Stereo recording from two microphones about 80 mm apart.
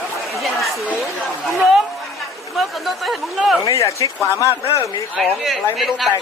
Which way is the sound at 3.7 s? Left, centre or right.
Left.